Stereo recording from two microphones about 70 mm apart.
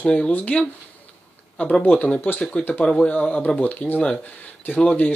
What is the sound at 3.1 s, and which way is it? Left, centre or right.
Speech, left.